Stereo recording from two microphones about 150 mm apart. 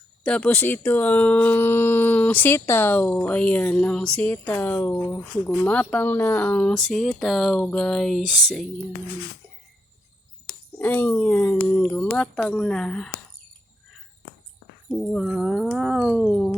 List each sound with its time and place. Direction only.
0.3 s speech: 10° left (ahead or behind)
10.8 s speech: 15° left (ahead or behind)
15.1 s speech: centre (ahead or behind)
16.2 s speech: 10° left (ahead or behind)